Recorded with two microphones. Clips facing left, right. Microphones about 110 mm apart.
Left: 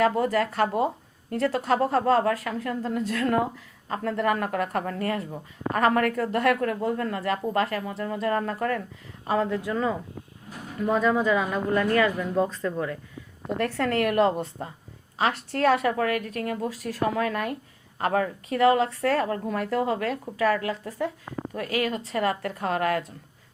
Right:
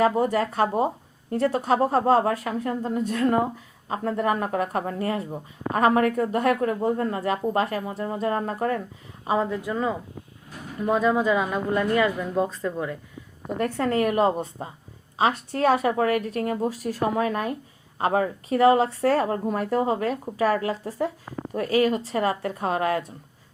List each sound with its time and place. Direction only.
0.0 s a woman's voice: 25° right (ahead or behind)
9.2 s a woman's voice: 10° right (ahead or behind)
15.5 s a woman's voice: 25° right (ahead or behind)